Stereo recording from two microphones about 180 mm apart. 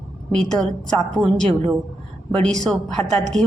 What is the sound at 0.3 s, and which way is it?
A woman's voice, centre (ahead or behind).